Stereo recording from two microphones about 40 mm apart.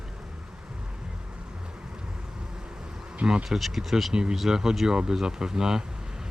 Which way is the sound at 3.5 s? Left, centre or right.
Centre.